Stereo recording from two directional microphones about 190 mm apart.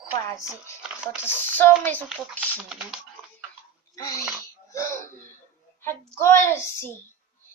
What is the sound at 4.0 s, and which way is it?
Sneeze, 15° left (ahead or behind).